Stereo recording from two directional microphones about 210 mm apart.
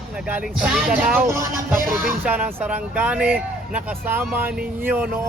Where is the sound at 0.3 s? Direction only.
5° right (ahead or behind).